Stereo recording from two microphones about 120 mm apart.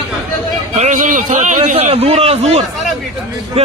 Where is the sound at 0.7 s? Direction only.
90° right; by 2.6 s 60° right (ahead or behind).